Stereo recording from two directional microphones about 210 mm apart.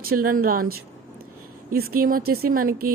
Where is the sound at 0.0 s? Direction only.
45° right (ahead or behind).